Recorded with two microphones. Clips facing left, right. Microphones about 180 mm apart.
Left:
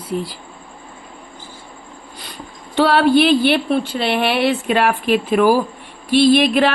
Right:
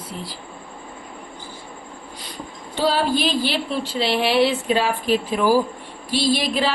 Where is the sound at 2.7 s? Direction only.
70° left (ahead or behind).